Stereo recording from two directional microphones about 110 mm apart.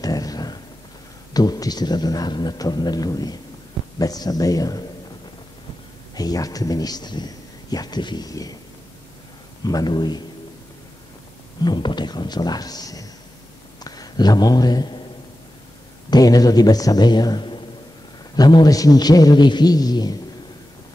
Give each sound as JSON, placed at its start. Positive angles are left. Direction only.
{"t": 0.0, "sound": "a sound", "side_deg": 35}
{"t": 1.3, "sound": "speech", "side_deg": 35}
{"t": 6.1, "sound": "speech", "side_deg": 35}
{"t": 9.6, "sound": "speech", "side_deg": 35}
{"t": 11.6, "sound": "a man's voice", "side_deg": 40}
{"t": 16.1, "sound": "speech", "side_deg": 35}